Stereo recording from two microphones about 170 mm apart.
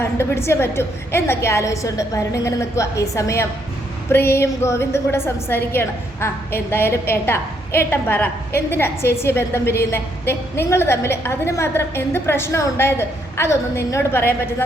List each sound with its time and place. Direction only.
0.0 s a woman's voice: 15° left (ahead or behind)